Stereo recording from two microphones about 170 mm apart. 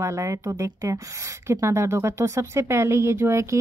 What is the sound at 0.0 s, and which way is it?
A woman's voice, 15° right (ahead or behind).